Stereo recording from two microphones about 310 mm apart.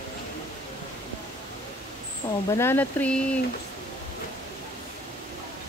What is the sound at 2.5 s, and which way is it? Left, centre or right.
Speech, centre.